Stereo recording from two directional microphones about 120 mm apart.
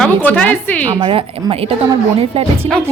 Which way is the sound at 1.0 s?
40° right (ahead or behind).